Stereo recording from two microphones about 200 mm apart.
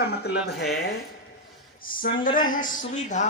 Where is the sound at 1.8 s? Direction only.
45° left (ahead or behind).